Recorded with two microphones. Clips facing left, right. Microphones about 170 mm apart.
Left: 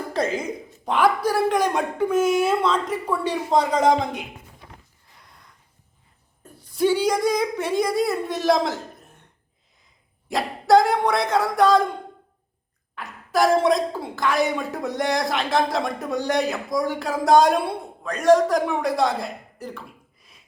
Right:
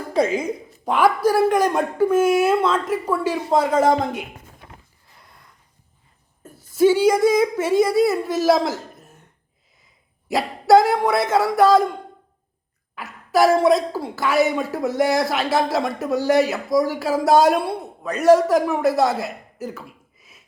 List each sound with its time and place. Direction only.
0.4 s a woman's voice: 5° right (ahead or behind)
4.6 s a sound: 55° right (ahead or behind)
6.7 s a woman's voice: 5° right (ahead or behind)
10.2 s a woman's voice: 5° right (ahead or behind)
13.0 s a woman's voice: 5° right (ahead or behind)